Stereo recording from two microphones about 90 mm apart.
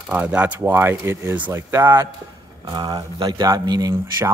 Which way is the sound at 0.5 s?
25° right (ahead or behind).